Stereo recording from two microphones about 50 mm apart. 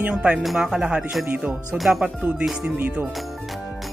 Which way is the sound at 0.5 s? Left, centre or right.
Centre.